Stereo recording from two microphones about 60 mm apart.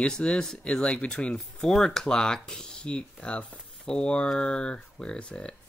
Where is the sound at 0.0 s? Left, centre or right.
Centre.